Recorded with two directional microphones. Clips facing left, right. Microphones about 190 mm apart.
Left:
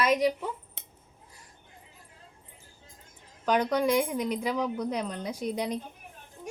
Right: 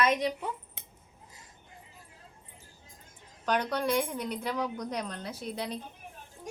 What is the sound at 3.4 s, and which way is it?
Speech, 10° left (ahead or behind).